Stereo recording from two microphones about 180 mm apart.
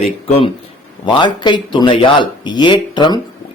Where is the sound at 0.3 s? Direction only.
35° left (ahead or behind).